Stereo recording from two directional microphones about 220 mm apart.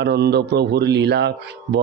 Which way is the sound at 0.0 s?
50° right (ahead or behind).